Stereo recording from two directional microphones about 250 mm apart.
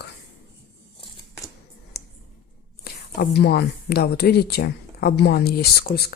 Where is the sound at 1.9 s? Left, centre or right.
Left.